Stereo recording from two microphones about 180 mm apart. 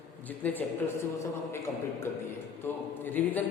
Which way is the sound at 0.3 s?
10° left (ahead or behind).